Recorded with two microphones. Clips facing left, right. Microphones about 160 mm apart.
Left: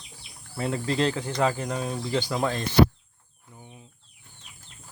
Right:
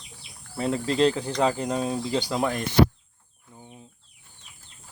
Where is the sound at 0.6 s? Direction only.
30° right (ahead or behind).